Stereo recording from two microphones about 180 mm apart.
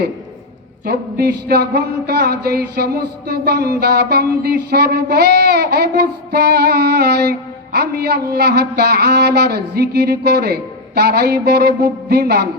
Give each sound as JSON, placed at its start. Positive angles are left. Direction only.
{"t": 0.9, "sound": "speech", "side_deg": -60}